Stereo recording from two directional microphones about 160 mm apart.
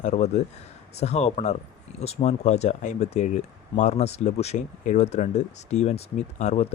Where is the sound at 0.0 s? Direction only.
45° left (ahead or behind).